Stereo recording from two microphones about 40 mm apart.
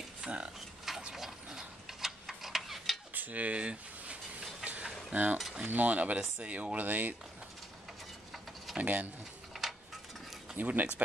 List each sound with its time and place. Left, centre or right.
0.2 s speech: centre
0.9 s mechanisms: centre
1.5 s a sound: centre
3.2 s speech: right
5.1 s cutlery: right
6.5 s speech: right
8.7 s cutlery: right
9.5 s a sound: centre
10.5 s speech: right